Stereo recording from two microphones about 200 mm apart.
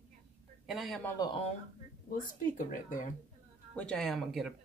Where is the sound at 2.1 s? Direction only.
40° left (ahead or behind).